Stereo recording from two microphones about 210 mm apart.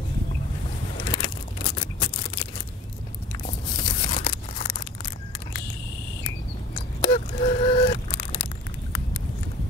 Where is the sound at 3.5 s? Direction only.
25° left (ahead or behind).